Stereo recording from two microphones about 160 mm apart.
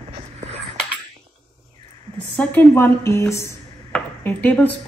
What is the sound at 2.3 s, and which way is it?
Speech, 10° left (ahead or behind).